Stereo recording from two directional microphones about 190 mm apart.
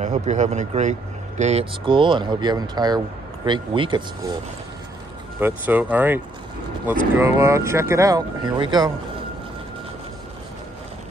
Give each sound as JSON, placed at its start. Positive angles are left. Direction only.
{"t": 0.0, "sound": "speech", "side_deg": -40}
{"t": 5.4, "sound": "speech", "side_deg": -10}